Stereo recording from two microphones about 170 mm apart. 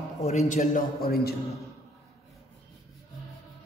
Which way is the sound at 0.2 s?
40° left (ahead or behind).